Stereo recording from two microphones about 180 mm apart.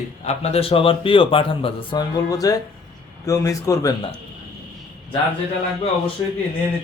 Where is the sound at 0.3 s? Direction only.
35° left (ahead or behind); by 3.9 s 20° left (ahead or behind).